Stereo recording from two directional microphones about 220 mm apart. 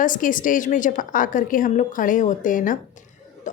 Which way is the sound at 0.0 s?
35° left (ahead or behind).